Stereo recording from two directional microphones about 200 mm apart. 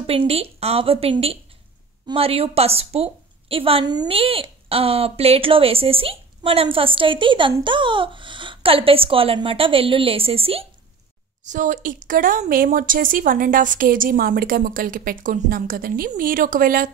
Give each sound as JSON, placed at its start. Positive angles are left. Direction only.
{"t": 0.0, "sound": "a woman's voice", "side_deg": -30}
{"t": 11.4, "sound": "speech", "side_deg": -40}